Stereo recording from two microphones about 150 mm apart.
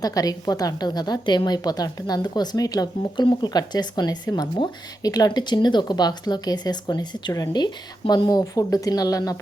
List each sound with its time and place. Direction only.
0.0 s a woman's voice: 25° left (ahead or behind)